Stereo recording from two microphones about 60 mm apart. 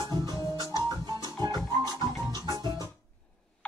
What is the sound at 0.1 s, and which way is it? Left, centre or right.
Music, left.